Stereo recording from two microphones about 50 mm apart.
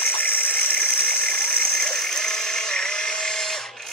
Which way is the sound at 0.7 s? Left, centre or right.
Left.